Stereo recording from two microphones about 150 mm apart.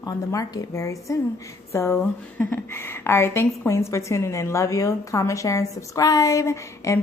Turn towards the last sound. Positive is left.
turn(degrees=20)  # may be behind; listen again after turning